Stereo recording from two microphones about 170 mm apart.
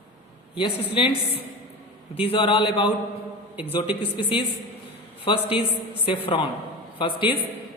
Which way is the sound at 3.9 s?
30° left (ahead or behind).